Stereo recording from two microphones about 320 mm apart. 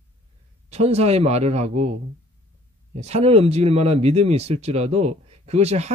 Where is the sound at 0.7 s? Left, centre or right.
Centre.